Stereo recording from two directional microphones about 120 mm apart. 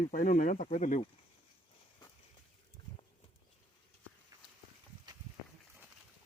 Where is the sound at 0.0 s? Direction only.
90° left.